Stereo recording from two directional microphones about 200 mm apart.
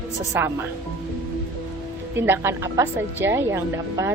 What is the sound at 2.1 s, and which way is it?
Speech, 10° right (ahead or behind).